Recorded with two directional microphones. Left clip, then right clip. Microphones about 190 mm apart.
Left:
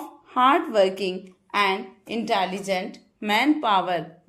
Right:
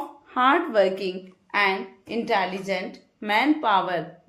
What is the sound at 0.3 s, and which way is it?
A woman's voice, 30° left (ahead or behind).